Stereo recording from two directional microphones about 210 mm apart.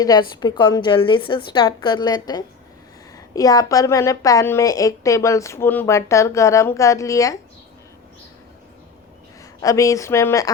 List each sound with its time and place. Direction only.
0.0 s a woman's voice: 20° left (ahead or behind)
9.6 s a woman's voice: 15° left (ahead or behind)